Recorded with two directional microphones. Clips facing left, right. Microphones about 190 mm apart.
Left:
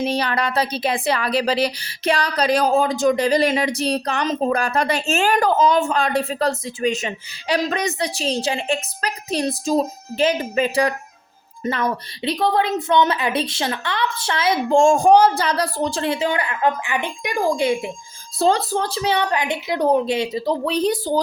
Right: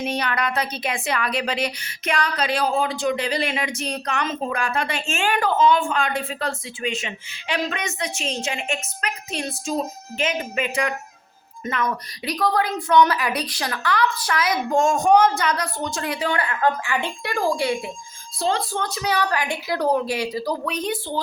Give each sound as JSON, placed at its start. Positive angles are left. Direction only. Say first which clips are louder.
{"t": 0.0, "sound": "a woman's voice", "louder": "left 3 dB", "side_deg": 30}
{"t": 18.3, "sound": "a woman's voice", "louder": "left 5 dB", "side_deg": 40}